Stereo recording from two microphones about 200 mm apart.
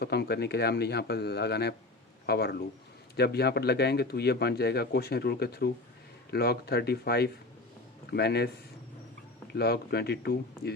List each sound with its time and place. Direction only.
0.0 s a man's voice: 55° left (ahead or behind)
9.5 s speech: 50° left (ahead or behind)